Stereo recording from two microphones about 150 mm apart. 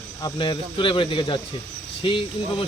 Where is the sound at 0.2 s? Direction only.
30° left (ahead or behind).